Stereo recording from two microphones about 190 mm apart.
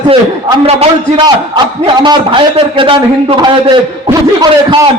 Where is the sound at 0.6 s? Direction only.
30° right (ahead or behind).